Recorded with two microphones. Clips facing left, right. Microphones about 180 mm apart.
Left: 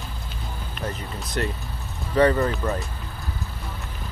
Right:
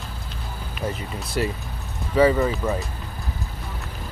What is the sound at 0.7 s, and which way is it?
Speech, 5° right (ahead or behind).